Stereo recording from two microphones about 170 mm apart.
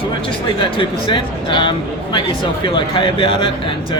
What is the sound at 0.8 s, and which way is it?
Speech, 30° left (ahead or behind).